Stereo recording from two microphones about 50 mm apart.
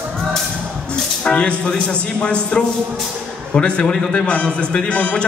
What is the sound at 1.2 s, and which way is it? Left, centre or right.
Music, left.